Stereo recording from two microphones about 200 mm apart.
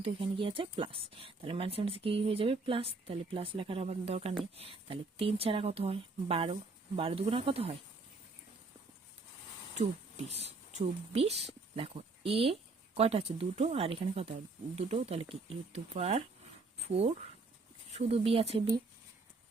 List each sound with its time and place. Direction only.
0.0 s speech: 25° right (ahead or behind)
9.7 s speech: 35° right (ahead or behind)